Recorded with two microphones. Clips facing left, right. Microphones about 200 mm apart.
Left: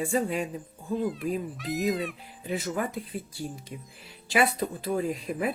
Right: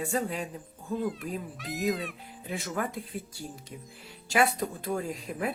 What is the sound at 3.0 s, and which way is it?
Speech, 45° right (ahead or behind).